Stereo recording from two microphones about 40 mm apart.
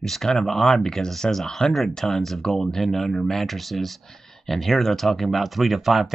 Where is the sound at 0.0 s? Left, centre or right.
Centre.